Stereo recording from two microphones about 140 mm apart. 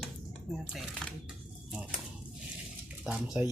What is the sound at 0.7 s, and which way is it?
Shuffling cards, centre (ahead or behind).